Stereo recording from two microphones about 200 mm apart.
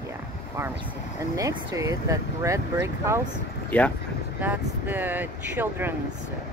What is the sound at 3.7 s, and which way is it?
Speech, 5° left (ahead or behind).